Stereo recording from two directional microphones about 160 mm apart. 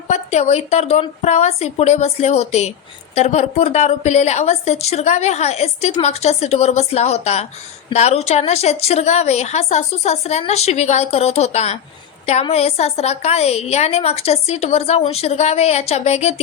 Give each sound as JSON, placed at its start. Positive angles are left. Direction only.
{"t": 0.1, "sound": "a woman's voice", "side_deg": 45}